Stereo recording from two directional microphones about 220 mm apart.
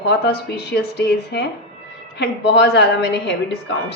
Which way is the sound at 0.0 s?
50° left (ahead or behind).